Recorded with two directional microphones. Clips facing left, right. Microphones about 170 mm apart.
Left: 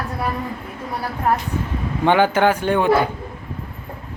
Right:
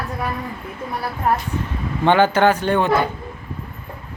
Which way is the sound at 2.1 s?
10° left (ahead or behind).